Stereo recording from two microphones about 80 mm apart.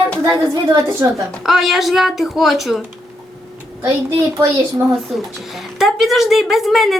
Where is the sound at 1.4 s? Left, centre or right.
Centre.